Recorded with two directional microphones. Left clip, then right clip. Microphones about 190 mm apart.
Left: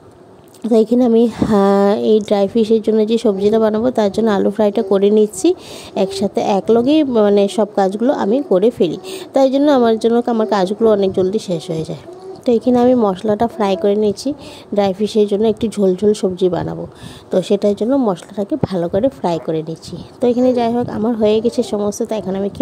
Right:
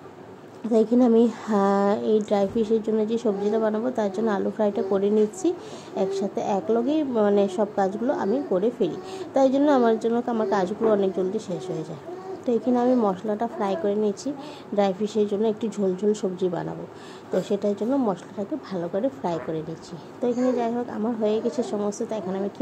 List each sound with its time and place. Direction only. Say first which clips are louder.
0.7 s speech: left 7 dB; 45° left (ahead or behind)